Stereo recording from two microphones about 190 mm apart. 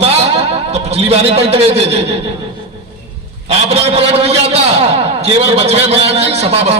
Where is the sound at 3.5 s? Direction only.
30° right (ahead or behind).